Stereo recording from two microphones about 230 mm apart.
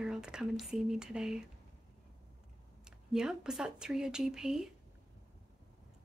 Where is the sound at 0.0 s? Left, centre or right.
Centre.